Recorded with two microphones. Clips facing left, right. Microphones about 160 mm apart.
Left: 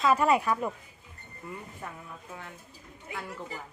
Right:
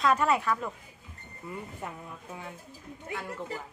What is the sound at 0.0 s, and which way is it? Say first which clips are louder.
Speech: left 2 dB; 10° left (ahead or behind).